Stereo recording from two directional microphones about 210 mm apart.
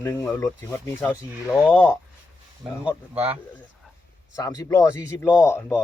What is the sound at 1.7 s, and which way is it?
Speech, 10° left (ahead or behind).